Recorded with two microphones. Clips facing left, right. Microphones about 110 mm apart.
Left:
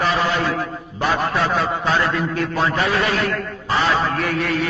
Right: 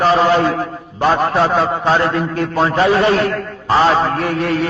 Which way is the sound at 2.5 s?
30° right (ahead or behind).